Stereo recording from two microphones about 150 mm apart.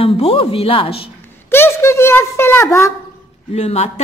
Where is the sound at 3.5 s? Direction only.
45° left (ahead or behind).